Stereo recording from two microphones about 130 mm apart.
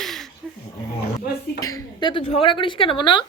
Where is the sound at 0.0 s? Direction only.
Centre (ahead or behind).